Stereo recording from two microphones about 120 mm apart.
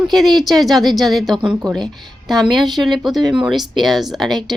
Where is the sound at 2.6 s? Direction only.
Centre (ahead or behind).